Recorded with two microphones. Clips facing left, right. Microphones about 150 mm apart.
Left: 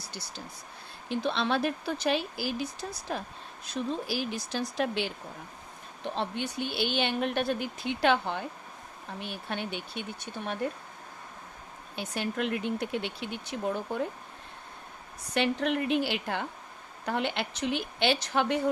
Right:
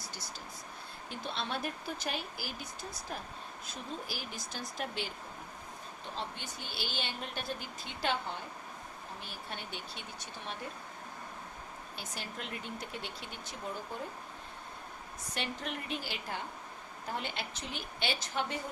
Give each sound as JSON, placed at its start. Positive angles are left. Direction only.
{"t": 1.1, "sound": "speech", "side_deg": 85}
{"t": 6.1, "sound": "speech", "side_deg": 65}
{"t": 11.9, "sound": "speech", "side_deg": 65}
{"t": 15.4, "sound": "speech", "side_deg": 75}